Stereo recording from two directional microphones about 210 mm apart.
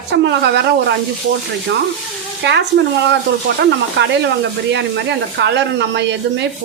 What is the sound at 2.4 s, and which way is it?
Speech, 55° right (ahead or behind).